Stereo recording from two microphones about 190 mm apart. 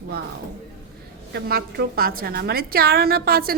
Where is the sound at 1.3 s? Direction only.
60° right (ahead or behind).